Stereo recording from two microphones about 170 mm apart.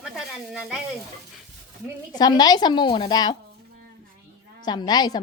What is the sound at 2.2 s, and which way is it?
A woman's voice, 25° left (ahead or behind).